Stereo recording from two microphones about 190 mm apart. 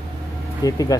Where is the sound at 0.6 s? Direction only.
20° left (ahead or behind).